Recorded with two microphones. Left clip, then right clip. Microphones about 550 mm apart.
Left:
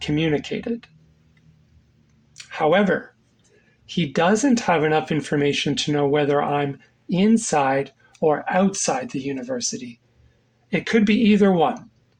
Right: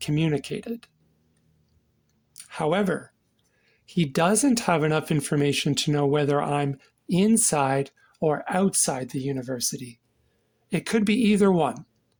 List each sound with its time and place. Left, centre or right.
0.0 s speech: right
2.3 s speech: right